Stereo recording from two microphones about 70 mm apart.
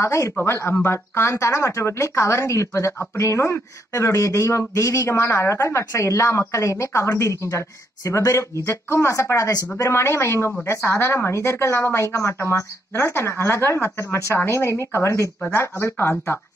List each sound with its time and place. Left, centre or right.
0.0 s speech: left
9.8 s speech: left